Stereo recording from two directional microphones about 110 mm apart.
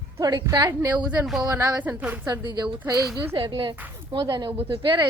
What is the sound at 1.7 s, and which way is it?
Speech, 15° right (ahead or behind).